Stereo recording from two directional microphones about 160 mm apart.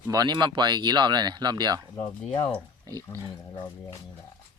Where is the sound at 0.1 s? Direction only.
25° right (ahead or behind).